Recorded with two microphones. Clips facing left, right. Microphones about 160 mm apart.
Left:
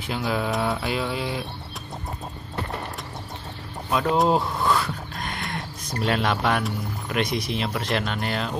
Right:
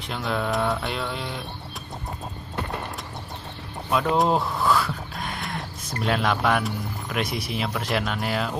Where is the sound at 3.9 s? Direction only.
Centre (ahead or behind).